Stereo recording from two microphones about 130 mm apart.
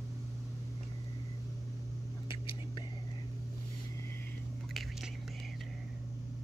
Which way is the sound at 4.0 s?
20° left (ahead or behind).